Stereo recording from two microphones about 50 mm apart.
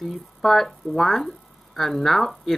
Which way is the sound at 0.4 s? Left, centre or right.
Centre.